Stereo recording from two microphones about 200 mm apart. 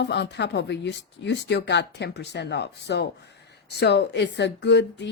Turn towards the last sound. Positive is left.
turn(degrees=60)  # may be behind; listen again after turning